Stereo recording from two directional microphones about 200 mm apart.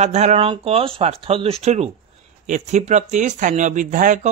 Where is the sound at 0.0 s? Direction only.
35° right (ahead or behind).